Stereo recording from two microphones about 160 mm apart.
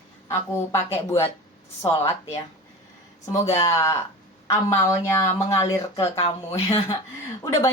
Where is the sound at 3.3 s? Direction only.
20° left (ahead or behind).